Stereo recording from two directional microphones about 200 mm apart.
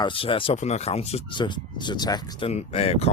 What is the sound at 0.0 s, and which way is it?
Speech, 25° left (ahead or behind).